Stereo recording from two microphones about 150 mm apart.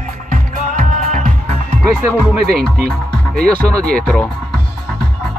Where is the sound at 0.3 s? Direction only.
60° right (ahead or behind).